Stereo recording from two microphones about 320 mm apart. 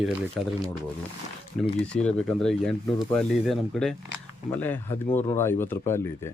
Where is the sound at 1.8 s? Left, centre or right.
Centre.